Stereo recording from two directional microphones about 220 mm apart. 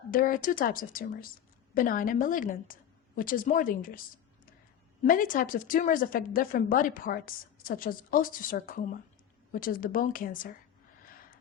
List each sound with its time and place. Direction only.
0.1 s a woman's voice: 40° left (ahead or behind)